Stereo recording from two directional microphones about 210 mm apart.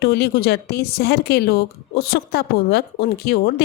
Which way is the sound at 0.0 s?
50° left (ahead or behind).